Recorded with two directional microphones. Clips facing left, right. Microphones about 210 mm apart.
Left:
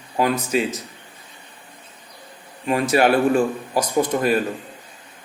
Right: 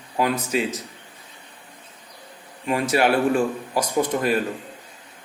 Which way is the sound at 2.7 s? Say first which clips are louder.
Left 3 dB; 45° left (ahead or behind).